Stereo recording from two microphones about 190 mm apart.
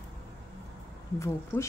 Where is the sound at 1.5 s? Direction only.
10° left (ahead or behind).